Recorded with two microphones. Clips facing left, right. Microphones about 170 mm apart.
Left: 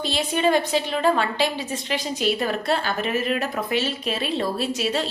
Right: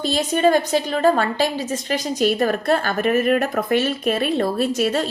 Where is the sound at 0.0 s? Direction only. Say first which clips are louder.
Right 4 dB; 45° right (ahead or behind).